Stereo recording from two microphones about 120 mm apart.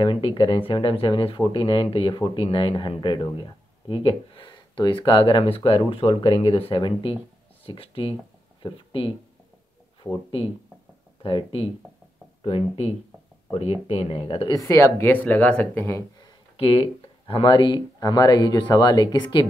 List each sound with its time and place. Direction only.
0.0 s speech: 45° left (ahead or behind)
11.2 s speech: 50° left (ahead or behind)
14.5 s speech: 25° left (ahead or behind)
16.5 s speech: 55° left (ahead or behind)